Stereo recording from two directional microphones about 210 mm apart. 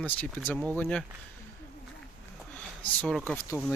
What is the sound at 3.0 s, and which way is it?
Speech, centre (ahead or behind).